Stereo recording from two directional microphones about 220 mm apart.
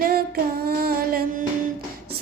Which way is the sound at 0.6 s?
45° right (ahead or behind).